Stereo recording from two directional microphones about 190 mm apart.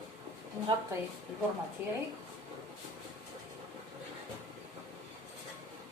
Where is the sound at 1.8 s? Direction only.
10° right (ahead or behind).